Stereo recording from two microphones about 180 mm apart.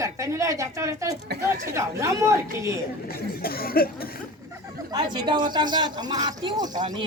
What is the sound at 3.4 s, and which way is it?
Speech, 55° left (ahead or behind).